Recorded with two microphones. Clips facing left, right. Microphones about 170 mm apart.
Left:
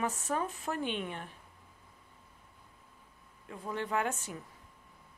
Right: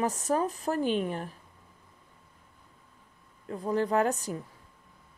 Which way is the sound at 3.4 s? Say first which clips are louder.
Right 9 dB; 35° right (ahead or behind).